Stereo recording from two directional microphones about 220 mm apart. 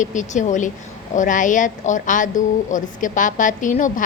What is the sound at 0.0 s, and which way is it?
A woman's voice, 35° left (ahead or behind).